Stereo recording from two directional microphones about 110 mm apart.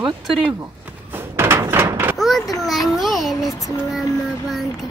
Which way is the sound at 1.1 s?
20° right (ahead or behind).